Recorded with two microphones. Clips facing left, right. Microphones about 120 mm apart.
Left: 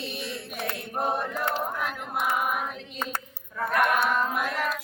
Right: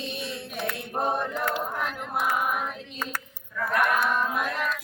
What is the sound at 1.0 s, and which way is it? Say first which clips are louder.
Choir: right 1 dB; 20° right (ahead or behind).